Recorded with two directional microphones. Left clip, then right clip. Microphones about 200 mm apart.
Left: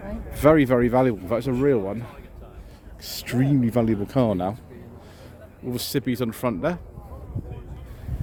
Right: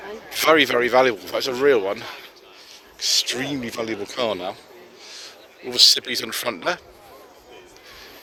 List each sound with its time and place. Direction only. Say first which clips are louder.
0.3 s speech: right 1 dB; 10° left (ahead or behind)
3.0 s a man's voice: right 6 dB; 25° left (ahead or behind); by 6.7 s 10° left (ahead or behind)